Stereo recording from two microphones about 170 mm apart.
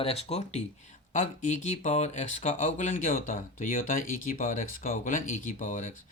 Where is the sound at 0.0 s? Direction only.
35° left (ahead or behind).